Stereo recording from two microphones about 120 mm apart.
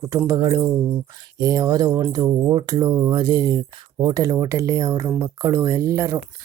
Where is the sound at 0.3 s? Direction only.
30° right (ahead or behind).